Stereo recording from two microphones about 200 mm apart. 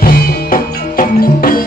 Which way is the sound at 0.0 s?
45° left (ahead or behind).